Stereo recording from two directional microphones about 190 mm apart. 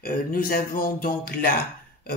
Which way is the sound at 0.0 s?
50° left (ahead or behind).